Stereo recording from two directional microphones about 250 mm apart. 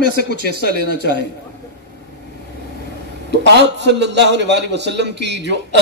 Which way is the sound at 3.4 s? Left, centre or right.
Right.